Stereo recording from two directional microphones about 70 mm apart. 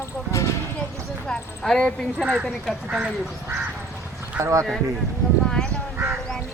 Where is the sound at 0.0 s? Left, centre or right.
Left.